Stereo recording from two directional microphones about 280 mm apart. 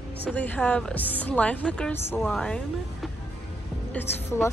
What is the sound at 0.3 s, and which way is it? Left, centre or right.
A woman's voice, centre.